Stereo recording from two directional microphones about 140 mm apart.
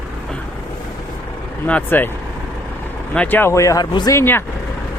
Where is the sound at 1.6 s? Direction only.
10° left (ahead or behind).